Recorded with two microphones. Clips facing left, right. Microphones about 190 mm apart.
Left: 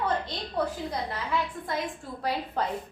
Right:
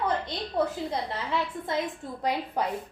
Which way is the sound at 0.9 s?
25° right (ahead or behind).